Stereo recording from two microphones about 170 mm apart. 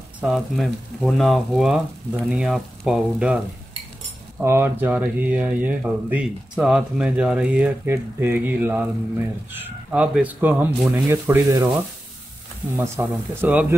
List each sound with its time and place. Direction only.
0.2 s speech: centre (ahead or behind)
4.4 s speech: 15° right (ahead or behind)
12.7 s speech: 15° right (ahead or behind)